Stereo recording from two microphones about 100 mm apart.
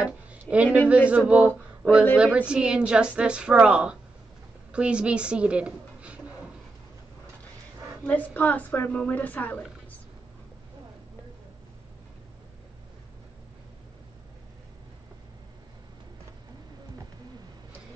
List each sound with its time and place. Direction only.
0.0 s a woman's voice: 10° right (ahead or behind)
8.0 s a woman's voice: 15° left (ahead or behind)